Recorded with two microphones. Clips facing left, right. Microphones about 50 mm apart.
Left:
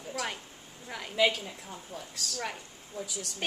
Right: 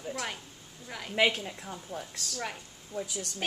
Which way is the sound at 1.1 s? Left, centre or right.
Right.